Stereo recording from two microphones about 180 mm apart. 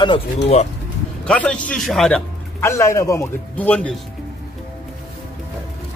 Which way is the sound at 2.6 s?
15° left (ahead or behind).